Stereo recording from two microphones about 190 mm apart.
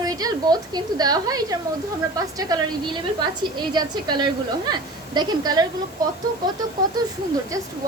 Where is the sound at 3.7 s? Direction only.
20° right (ahead or behind).